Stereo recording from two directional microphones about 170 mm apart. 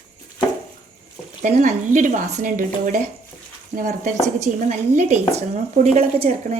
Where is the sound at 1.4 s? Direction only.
45° right (ahead or behind).